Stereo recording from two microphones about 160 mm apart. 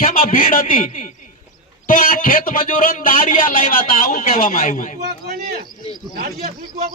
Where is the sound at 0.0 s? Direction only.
65° left (ahead or behind).